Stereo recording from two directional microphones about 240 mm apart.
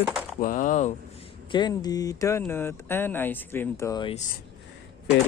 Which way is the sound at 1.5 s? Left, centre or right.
Centre.